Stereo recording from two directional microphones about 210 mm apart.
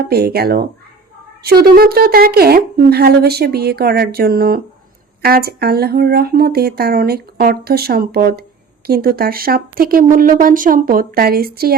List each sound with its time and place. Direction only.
0.0 s speech: 50° right (ahead or behind)